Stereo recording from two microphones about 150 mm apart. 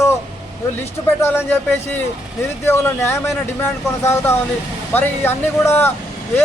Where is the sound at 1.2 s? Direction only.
15° left (ahead or behind).